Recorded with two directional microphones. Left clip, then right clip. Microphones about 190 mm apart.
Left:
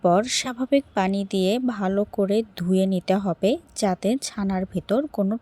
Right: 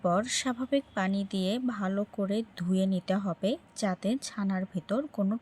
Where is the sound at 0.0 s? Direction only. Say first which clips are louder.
Left 8 dB; 30° left (ahead or behind).